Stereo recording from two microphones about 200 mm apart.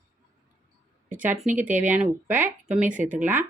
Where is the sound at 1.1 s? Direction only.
10° right (ahead or behind).